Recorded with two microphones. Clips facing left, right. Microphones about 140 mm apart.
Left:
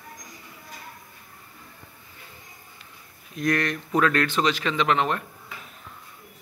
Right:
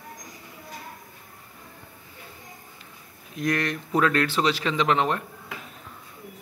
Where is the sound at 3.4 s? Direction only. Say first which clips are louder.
Left 1 dB; 25° right (ahead or behind).